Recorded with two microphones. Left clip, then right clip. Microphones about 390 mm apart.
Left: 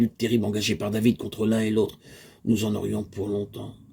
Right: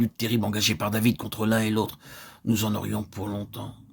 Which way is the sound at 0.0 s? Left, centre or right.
Right.